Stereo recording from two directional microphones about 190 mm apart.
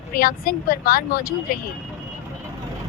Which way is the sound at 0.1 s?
50° left (ahead or behind).